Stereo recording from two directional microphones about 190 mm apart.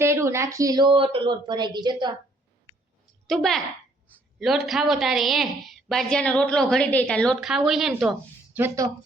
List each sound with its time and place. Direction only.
0.0 s speech: 15° right (ahead or behind)
3.2 s a woman's voice: centre (ahead or behind)
8.5 s speech: 15° right (ahead or behind)